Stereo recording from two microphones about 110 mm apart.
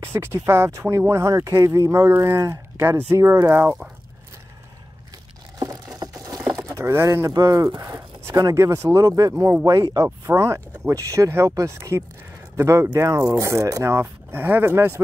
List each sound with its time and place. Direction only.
0.0 s speech: 25° right (ahead or behind)
5.9 s a sound: 35° right (ahead or behind)
8.4 s speech: 30° right (ahead or behind)